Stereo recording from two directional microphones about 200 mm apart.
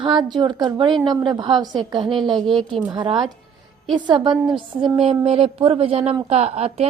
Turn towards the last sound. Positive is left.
turn(degrees=-30)  # may be behind; listen again after turning